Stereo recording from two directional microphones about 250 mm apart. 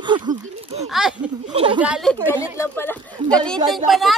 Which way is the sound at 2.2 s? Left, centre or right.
Centre.